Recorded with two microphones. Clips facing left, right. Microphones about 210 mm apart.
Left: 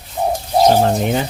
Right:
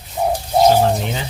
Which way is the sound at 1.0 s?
50° left (ahead or behind).